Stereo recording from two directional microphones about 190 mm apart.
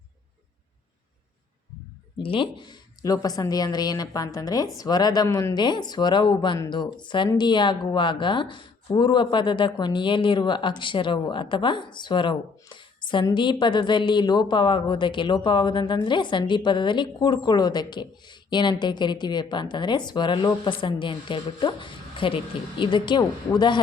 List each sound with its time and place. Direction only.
2.1 s speech: 25° left (ahead or behind)